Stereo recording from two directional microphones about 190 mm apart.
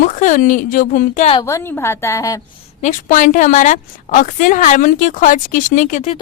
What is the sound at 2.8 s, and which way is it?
A woman's voice, 40° left (ahead or behind).